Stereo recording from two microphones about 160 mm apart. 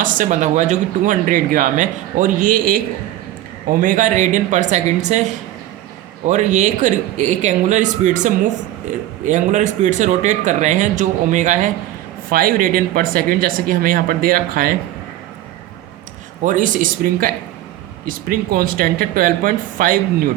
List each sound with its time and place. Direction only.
0.0 s speech: 55° right (ahead or behind)
12.3 s speech: 60° right (ahead or behind)
16.4 s speech: 55° right (ahead or behind)